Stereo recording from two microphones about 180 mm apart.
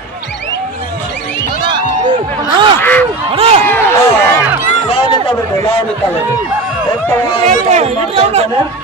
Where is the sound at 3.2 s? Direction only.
30° right (ahead or behind).